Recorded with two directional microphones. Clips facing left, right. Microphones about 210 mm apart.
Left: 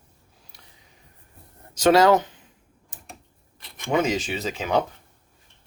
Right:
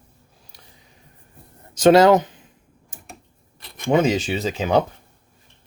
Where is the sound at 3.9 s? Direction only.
30° right (ahead or behind).